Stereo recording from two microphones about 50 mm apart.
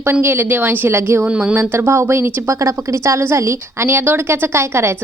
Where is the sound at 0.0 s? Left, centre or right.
Right.